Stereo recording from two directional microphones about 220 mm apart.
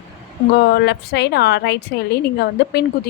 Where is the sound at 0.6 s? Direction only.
50° left (ahead or behind).